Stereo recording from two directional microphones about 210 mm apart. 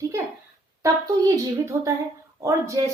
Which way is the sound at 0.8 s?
15° right (ahead or behind).